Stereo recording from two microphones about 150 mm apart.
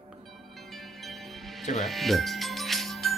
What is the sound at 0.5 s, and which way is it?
Music, centre (ahead or behind).